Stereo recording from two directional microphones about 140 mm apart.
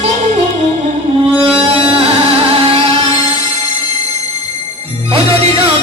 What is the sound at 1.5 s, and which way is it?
Music, 40° right (ahead or behind).